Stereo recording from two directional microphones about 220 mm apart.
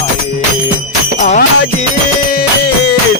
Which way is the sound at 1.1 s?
35° left (ahead or behind).